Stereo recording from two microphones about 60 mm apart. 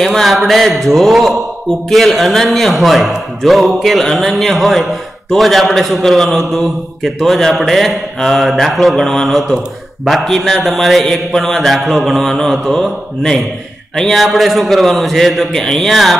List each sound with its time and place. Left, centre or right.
0.0 s a man's voice: centre